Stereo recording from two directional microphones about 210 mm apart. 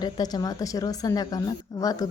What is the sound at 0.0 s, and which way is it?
A woman's voice, 20° left (ahead or behind).